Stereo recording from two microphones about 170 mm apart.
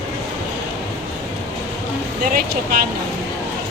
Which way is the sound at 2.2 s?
55° right (ahead or behind).